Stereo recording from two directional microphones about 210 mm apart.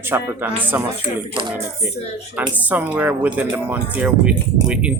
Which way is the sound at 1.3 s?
20° right (ahead or behind).